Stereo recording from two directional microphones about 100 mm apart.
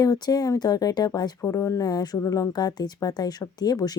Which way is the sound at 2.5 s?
45° left (ahead or behind).